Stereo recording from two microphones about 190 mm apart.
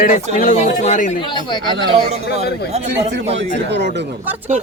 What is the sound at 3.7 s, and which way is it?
Speech, 65° right (ahead or behind).